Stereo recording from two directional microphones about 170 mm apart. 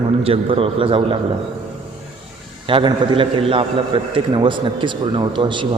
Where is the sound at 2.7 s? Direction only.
30° right (ahead or behind).